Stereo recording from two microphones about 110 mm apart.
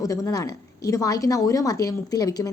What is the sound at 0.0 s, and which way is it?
A woman's voice, 30° left (ahead or behind).